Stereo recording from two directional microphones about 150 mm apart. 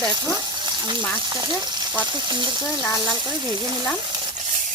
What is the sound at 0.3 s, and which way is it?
Frying, 30° right (ahead or behind).